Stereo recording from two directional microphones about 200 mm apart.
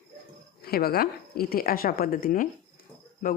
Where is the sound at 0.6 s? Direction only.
50° left (ahead or behind).